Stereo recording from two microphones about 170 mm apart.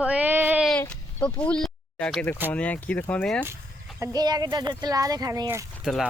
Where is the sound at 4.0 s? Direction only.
25° right (ahead or behind).